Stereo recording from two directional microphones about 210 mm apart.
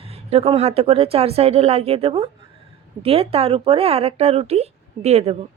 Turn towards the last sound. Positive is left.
turn(degrees=-30)  # may be behind; listen again after turning